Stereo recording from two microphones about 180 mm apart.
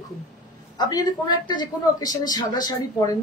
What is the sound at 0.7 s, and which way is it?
A woman's voice, 20° left (ahead or behind).